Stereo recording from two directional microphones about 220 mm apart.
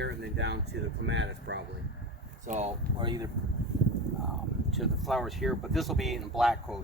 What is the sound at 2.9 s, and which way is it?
Speech, 20° right (ahead or behind).